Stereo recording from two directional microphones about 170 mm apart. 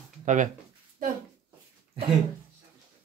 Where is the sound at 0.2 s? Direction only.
50° right (ahead or behind).